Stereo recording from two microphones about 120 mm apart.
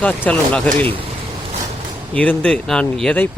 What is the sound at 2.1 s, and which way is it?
Speech, 10° left (ahead or behind).